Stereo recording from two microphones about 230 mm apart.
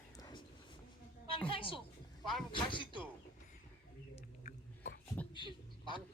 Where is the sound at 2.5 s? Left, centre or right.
Left.